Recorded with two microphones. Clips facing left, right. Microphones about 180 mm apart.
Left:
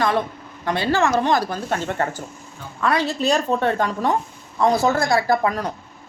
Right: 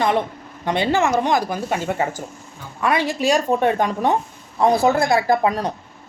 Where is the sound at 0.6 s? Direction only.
20° right (ahead or behind).